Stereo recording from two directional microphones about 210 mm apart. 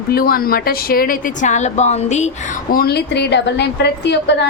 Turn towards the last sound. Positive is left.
turn(degrees=55)  # may be behind; listen again after turning